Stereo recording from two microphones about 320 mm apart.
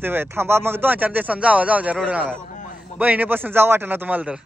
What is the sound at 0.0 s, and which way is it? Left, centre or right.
A man's voice, centre.